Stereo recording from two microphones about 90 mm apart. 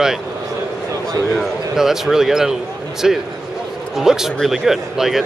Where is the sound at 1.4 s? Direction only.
5° right (ahead or behind).